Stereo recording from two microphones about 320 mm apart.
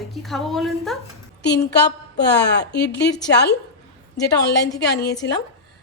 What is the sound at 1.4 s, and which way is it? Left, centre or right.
A woman's voice, left.